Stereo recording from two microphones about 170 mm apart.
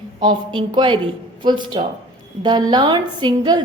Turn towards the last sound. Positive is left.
turn(degrees=-25)  # may be behind; listen again after turning